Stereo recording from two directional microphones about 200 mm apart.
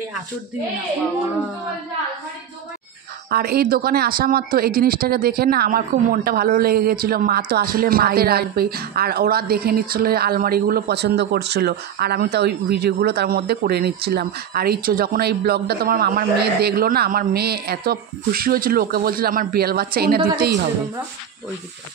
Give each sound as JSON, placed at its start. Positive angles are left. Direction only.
{"t": 3.3, "sound": "speech", "side_deg": -50}